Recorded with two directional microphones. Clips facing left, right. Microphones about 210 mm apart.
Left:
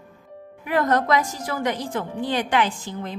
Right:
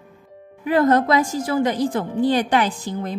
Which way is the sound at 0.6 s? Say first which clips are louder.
Right 4 dB; 30° right (ahead or behind).